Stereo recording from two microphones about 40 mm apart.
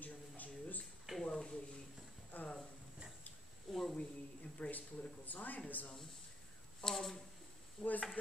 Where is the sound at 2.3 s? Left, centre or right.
Left.